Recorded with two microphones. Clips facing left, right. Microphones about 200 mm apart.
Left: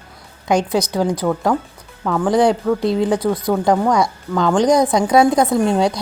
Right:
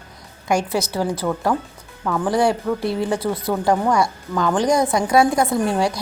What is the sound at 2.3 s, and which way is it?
Speech, 20° left (ahead or behind).